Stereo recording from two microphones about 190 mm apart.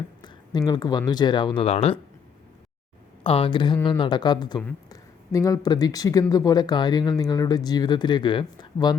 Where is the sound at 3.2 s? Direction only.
30° left (ahead or behind).